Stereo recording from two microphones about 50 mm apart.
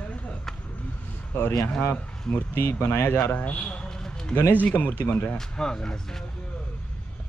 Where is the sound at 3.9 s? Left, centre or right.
Centre.